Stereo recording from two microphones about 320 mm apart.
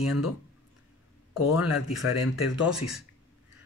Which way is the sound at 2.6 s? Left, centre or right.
Centre.